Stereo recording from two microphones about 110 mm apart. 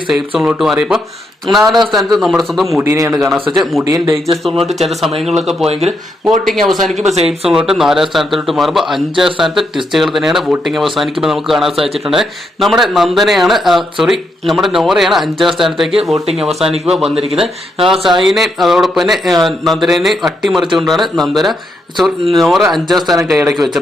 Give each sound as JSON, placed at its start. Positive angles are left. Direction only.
{"t": 0.1, "sound": "a man's voice", "side_deg": -5}
{"t": 2.8, "sound": "speech", "side_deg": -25}
{"t": 3.2, "sound": "a man's voice", "side_deg": 0}
{"t": 5.6, "sound": "speech", "side_deg": -65}
{"t": 6.2, "sound": "a man's voice", "side_deg": 0}